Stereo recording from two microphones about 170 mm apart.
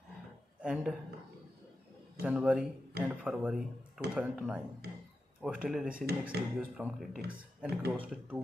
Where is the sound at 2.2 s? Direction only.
5° right (ahead or behind).